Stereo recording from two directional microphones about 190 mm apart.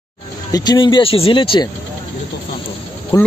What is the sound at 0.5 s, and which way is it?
Speech, 20° left (ahead or behind).